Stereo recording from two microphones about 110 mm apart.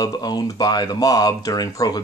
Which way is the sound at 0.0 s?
35° left (ahead or behind).